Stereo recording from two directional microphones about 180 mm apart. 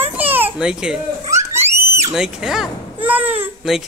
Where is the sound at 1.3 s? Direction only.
15° right (ahead or behind).